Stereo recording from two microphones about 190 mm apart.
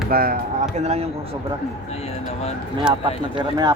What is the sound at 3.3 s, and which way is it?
Speech, 20° right (ahead or behind).